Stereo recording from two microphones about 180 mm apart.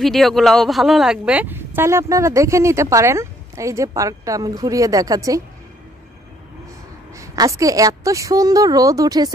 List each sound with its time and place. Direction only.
0.0 s speech: centre (ahead or behind); by 5.4 s 20° right (ahead or behind)
7.2 s a woman's voice: 15° right (ahead or behind)